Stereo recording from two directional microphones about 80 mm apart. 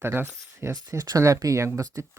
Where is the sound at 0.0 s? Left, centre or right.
Right.